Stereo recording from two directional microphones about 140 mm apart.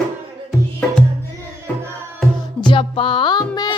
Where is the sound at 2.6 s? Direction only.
40° left (ahead or behind).